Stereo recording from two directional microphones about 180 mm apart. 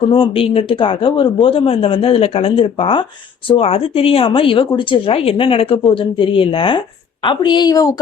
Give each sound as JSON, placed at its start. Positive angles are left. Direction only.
{"t": 0.1, "sound": "speech", "side_deg": 30}